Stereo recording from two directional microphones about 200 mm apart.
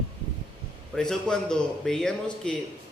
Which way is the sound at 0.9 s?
5° left (ahead or behind).